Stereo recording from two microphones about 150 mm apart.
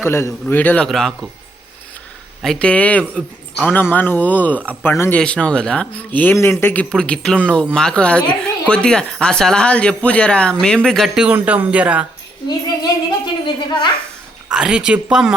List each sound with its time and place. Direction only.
0.0 s speech: 15° left (ahead or behind)
2.4 s speech: 5° left (ahead or behind)
12.5 s a sound: 25° left (ahead or behind)
14.5 s speech: 5° right (ahead or behind)